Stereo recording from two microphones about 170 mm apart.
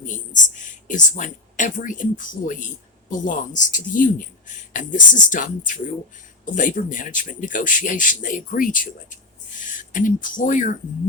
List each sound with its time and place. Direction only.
0.0 s speech: 50° left (ahead or behind)